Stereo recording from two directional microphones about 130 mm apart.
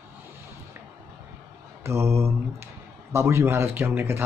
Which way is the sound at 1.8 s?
20° right (ahead or behind).